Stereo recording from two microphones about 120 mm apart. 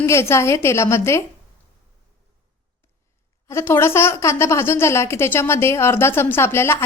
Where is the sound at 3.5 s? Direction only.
20° left (ahead or behind).